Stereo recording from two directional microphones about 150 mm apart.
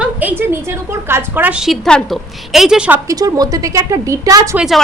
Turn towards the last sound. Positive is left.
turn(degrees=-5)  # may be behind; listen again after turning